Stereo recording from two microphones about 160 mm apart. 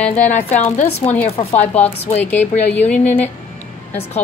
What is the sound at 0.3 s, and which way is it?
Speech, 45° left (ahead or behind).